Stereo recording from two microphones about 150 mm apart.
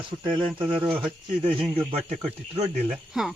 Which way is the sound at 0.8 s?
10° right (ahead or behind).